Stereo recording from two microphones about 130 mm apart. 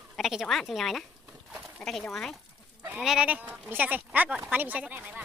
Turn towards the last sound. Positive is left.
turn(degrees=-15)  # may be behind; listen again after turning